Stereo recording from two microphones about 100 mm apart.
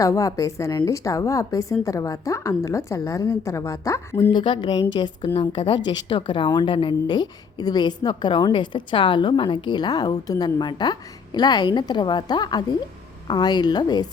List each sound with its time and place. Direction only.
0.0 s a woman's voice: 35° left (ahead or behind)
4.3 s a woman's voice: 50° left (ahead or behind)
5.4 s a woman's voice: 65° left (ahead or behind)
5.8 s a woman's voice: 50° left (ahead or behind)